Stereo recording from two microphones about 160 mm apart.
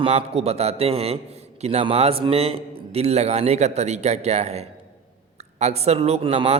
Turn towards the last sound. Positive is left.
turn(degrees=-35)  # may be behind; listen again after turning